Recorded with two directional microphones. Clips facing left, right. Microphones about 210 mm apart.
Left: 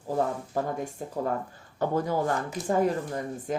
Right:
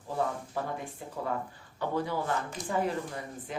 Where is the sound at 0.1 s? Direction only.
45° left (ahead or behind).